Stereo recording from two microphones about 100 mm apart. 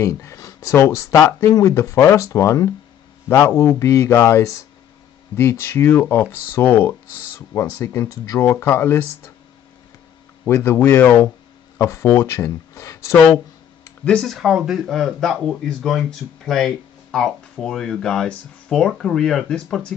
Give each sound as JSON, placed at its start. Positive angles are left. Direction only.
{"t": 0.0, "sound": "speech", "side_deg": 30}
{"t": 10.4, "sound": "speech", "side_deg": 25}
{"t": 14.0, "sound": "speech", "side_deg": 5}